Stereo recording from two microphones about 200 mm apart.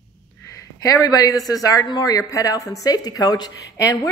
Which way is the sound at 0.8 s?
15° left (ahead or behind).